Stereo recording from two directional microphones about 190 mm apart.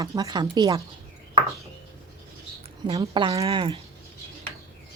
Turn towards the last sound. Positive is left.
turn(degrees=-25)  # may be behind; listen again after turning